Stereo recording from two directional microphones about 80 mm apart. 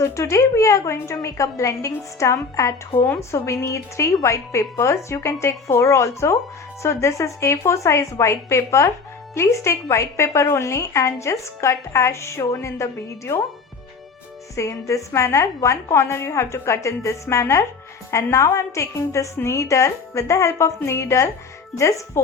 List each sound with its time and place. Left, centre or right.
0.0 s a woman's voice: left
14.5 s a woman's voice: left